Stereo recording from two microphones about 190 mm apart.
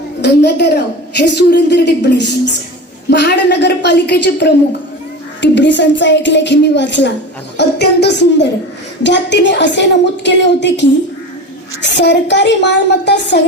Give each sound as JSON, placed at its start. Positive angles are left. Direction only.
{"t": 0.2, "sound": "a woman's voice", "side_deg": 60}